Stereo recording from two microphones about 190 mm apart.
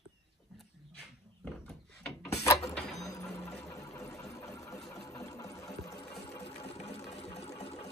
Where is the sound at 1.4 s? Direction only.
5° left (ahead or behind).